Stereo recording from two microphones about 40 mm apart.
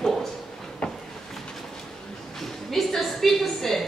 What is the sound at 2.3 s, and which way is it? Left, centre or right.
A woman's voice, centre.